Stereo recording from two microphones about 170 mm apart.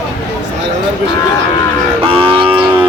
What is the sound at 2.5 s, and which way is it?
Music, 30° right (ahead or behind).